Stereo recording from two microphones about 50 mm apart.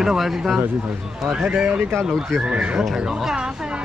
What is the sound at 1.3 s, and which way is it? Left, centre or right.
Speech, right.